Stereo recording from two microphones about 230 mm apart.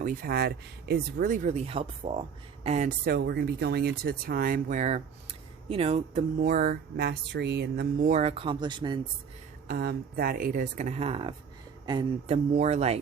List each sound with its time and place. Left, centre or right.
0.0 s speech: right
6.4 s speech: right
8.1 s speech: right
9.6 s speech: right